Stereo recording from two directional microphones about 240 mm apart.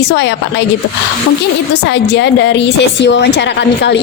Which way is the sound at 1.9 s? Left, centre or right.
Left.